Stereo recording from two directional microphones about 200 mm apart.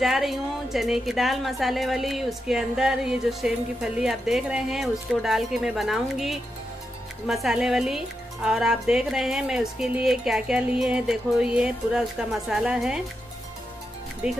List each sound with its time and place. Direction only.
0.0 s a woman's voice: centre (ahead or behind)
14.2 s a woman's voice: 5° right (ahead or behind)